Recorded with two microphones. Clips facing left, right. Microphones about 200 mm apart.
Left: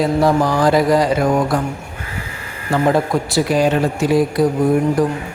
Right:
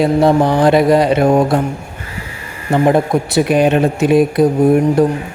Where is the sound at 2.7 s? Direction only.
20° right (ahead or behind).